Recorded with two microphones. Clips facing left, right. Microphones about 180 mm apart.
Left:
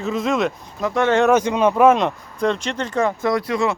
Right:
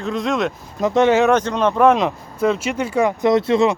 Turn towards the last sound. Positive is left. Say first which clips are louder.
# right 5 dB
turn(degrees=-25)  # may be behind; listen again after turning